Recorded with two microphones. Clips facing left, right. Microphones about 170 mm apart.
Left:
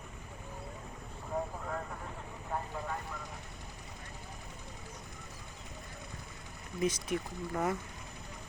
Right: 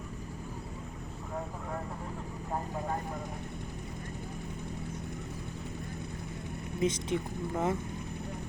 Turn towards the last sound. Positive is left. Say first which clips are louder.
# right 3 dB
turn(degrees=-25)  # may be behind; listen again after turning